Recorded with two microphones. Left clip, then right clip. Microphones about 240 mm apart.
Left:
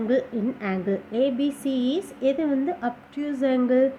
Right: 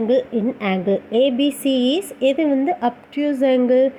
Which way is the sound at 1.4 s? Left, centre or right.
Centre.